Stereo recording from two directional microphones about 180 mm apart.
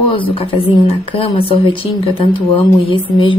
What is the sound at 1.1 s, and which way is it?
Speech, 30° left (ahead or behind).